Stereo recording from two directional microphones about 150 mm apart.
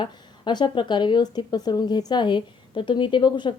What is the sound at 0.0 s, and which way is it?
Speech, 30° left (ahead or behind).